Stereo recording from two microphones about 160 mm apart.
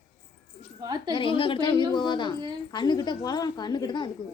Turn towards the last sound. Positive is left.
turn(degrees=25)  # may be behind; listen again after turning